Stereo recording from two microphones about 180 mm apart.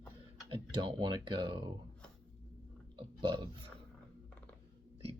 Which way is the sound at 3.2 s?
25° right (ahead or behind).